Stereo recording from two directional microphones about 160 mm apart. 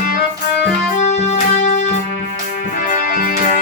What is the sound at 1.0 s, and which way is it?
Music, 45° left (ahead or behind).